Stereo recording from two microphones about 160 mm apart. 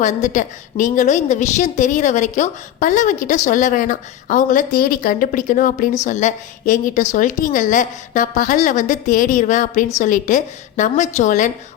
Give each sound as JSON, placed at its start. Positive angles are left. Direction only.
{"t": 0.0, "sound": "a woman's voice", "side_deg": 50}